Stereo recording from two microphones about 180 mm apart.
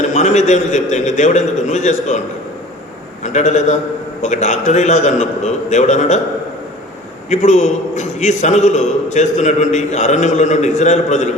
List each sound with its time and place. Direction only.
0.1 s a man's voice: 40° left (ahead or behind)
3.2 s a man's voice: 40° left (ahead or behind)
7.3 s a man's voice: 40° left (ahead or behind)